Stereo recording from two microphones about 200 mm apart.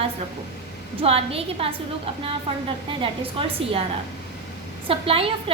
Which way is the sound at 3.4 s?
25° right (ahead or behind).